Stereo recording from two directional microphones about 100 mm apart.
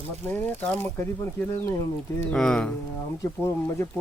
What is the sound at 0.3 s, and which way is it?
Speech, 15° left (ahead or behind).